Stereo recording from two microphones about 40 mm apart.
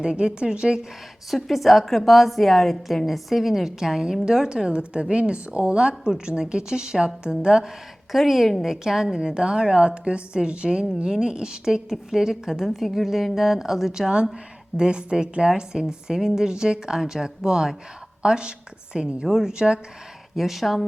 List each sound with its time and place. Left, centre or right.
0.0 s a woman's voice: right
1.3 s a woman's voice: centre
8.1 s a woman's voice: centre
8.6 s a woman's voice: centre
14.8 s a woman's voice: right
20.3 s a woman's voice: centre